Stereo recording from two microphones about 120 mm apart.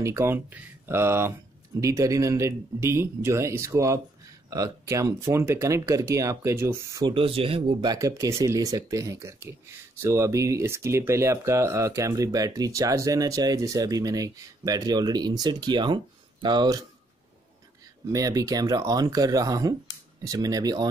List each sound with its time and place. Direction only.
0.0 s speech: 20° right (ahead or behind)
7.2 s speech: 50° right (ahead or behind)
7.8 s speech: 30° right (ahead or behind)
18.1 s speech: 30° right (ahead or behind)